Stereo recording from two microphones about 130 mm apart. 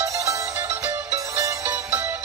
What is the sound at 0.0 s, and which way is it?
Music, 25° right (ahead or behind).